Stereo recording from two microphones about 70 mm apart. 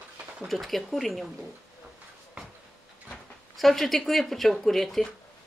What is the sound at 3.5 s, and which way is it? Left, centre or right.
A woman's voice, centre.